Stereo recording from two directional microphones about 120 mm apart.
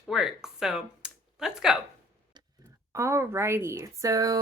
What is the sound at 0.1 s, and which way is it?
Speech, 5° right (ahead or behind).